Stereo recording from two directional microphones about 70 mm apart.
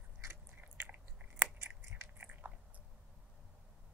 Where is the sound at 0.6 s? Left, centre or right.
Right.